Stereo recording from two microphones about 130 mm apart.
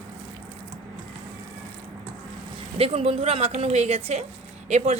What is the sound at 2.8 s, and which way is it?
A woman's voice, 50° right (ahead or behind).